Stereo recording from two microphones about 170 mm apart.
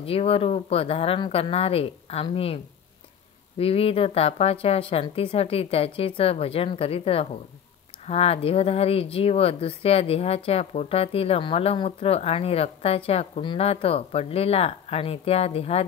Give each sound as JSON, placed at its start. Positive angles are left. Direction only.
{"t": 0.0, "sound": "speech", "side_deg": 35}